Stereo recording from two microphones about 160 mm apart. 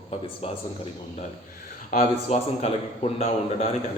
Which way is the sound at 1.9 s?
45° left (ahead or behind).